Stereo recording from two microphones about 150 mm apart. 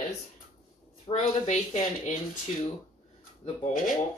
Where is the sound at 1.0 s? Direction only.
40° left (ahead or behind).